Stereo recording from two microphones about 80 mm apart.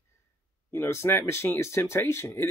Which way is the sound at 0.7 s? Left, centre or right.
Left.